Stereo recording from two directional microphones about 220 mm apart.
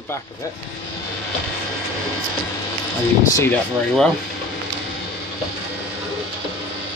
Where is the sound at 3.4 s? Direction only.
5° left (ahead or behind).